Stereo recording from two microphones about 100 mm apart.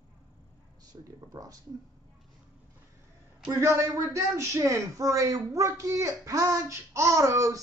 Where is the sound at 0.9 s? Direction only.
45° right (ahead or behind).